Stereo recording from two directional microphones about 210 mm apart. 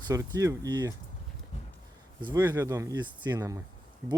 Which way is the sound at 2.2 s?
15° right (ahead or behind).